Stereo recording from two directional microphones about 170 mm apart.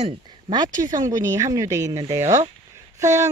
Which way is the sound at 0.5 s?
25° right (ahead or behind).